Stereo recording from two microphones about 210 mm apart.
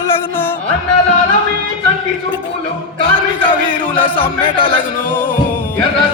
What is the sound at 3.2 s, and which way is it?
Music, 25° left (ahead or behind).